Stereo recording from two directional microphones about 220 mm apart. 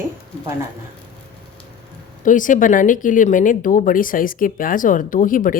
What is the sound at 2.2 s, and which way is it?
Speech, 35° left (ahead or behind).